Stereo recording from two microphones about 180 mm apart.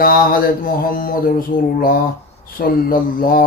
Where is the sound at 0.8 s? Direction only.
50° left (ahead or behind).